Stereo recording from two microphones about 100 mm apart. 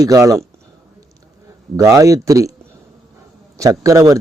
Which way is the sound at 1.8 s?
35° right (ahead or behind).